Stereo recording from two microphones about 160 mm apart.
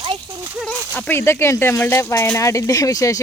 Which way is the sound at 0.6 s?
10° left (ahead or behind).